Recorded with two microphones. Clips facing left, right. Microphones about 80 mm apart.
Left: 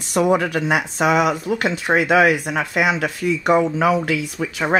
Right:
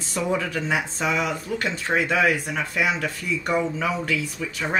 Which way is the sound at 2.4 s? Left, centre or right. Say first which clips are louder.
Left 5 dB; left.